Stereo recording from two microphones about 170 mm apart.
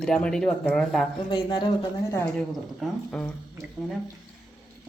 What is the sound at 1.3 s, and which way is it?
Speech, 25° left (ahead or behind).